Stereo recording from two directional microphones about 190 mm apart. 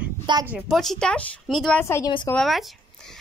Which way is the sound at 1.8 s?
15° left (ahead or behind).